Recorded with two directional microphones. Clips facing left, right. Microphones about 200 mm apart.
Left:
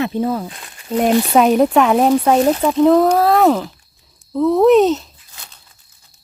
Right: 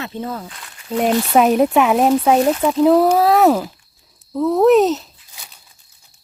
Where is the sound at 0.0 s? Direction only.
15° left (ahead or behind).